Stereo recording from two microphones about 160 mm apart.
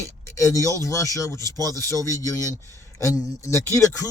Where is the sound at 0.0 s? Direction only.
20° left (ahead or behind).